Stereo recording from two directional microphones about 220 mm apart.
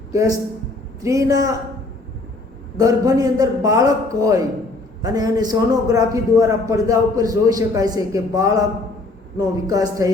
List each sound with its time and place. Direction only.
0.1 s a man's voice: 15° right (ahead or behind)
2.7 s a man's voice: 15° right (ahead or behind)
9.6 s a man's voice: 15° right (ahead or behind)